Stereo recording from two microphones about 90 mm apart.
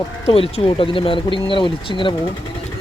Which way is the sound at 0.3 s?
90° left.